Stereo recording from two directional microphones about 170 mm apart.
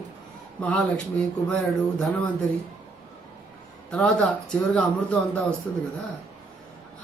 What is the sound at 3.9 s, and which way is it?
Speech, 5° left (ahead or behind).